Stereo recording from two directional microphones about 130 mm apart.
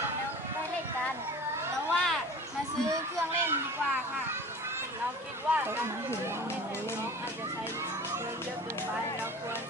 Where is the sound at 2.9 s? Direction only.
15° right (ahead or behind).